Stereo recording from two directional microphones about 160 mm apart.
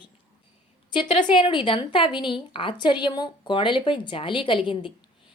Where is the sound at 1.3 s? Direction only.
30° left (ahead or behind).